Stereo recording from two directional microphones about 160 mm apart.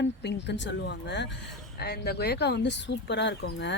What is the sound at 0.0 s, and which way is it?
Speech, 90° left.